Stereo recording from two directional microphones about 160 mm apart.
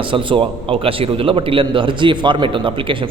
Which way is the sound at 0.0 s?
30° right (ahead or behind).